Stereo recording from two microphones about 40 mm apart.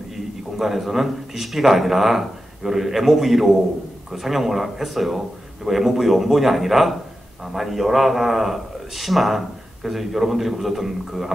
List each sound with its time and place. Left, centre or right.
0.6 s speech: centre